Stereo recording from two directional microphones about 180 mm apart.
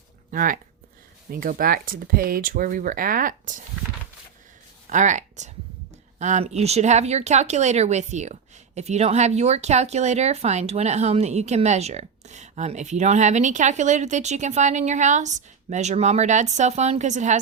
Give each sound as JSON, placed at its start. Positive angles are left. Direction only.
{"t": 0.3, "sound": "speech", "side_deg": -50}
{"t": 4.9, "sound": "speech", "side_deg": -45}